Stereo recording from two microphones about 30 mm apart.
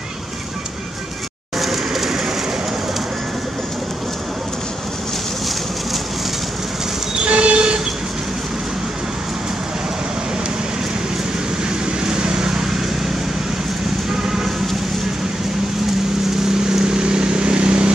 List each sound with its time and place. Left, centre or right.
1.6 s vehicle: centre
7.2 s train: right
12.0 s vehicle: right
14.2 s a sound: centre
16.6 s vehicle: right